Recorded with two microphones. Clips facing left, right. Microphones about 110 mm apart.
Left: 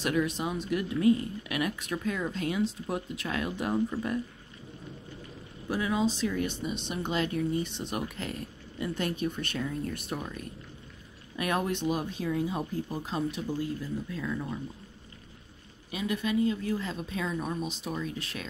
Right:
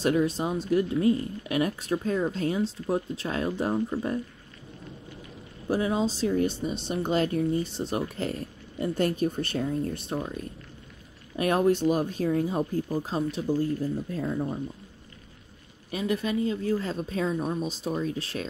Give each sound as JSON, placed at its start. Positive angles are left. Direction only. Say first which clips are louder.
{"t": 0.0, "sound": "a woman's voice", "louder": "right 4 dB", "side_deg": -35}
{"t": 5.7, "sound": "a woman's voice", "louder": "right 3 dB", "side_deg": -30}
{"t": 15.9, "sound": "a woman's voice", "louder": "right 2 dB", "side_deg": -35}